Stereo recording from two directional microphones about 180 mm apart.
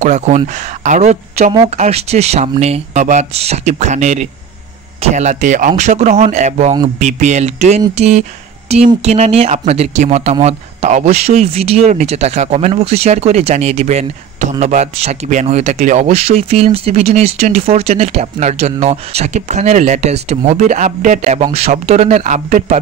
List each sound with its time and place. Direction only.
0.0 s a woman's voice: 40° right (ahead or behind)